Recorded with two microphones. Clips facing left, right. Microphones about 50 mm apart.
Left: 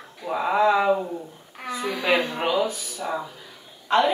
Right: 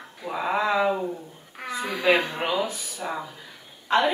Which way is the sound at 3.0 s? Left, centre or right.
Centre.